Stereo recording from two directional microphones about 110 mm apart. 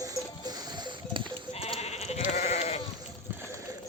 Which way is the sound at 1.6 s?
70° left (ahead or behind).